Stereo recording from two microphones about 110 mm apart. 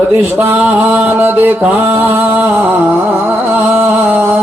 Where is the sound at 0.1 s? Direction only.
20° right (ahead or behind).